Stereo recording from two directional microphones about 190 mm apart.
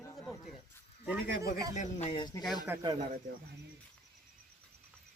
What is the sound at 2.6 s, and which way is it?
Speech, 20° right (ahead or behind).